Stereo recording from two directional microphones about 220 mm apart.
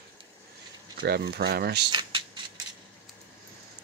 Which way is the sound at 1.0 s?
45° right (ahead or behind).